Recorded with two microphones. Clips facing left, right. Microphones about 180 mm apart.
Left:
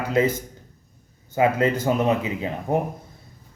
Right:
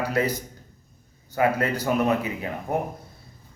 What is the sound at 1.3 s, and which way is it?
A man's voice, 25° left (ahead or behind).